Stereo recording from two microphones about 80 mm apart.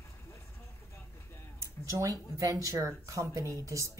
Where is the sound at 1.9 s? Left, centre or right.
Right.